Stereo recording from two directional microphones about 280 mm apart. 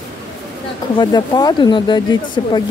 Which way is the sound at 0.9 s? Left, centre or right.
Centre.